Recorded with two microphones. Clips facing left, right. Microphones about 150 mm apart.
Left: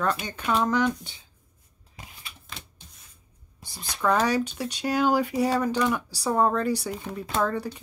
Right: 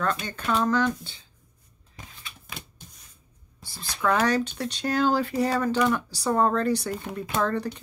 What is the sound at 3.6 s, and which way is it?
Speech, 15° left (ahead or behind).